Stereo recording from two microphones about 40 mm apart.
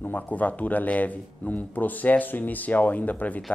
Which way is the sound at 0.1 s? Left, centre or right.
Left.